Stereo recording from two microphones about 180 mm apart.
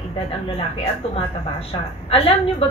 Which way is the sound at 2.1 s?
30° left (ahead or behind).